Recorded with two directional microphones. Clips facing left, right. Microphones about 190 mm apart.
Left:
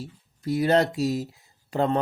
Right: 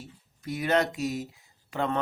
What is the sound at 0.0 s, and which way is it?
Speech, 35° left (ahead or behind).